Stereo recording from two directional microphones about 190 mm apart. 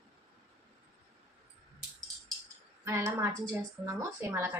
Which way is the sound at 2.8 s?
15° right (ahead or behind).